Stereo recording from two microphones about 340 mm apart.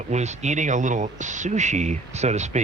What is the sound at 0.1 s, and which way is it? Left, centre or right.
Speech, centre.